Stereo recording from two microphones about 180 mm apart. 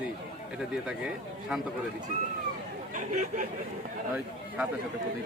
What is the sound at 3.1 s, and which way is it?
Speech, 45° right (ahead or behind).